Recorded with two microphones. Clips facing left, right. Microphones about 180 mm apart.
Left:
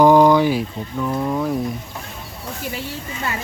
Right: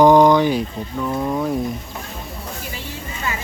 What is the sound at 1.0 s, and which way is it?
Speech, 5° right (ahead or behind).